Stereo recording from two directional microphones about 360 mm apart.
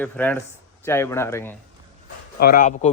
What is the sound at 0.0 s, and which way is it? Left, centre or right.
Speech, centre.